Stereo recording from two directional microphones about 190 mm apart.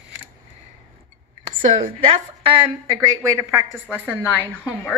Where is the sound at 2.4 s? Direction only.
25° right (ahead or behind); by 4.4 s 10° right (ahead or behind).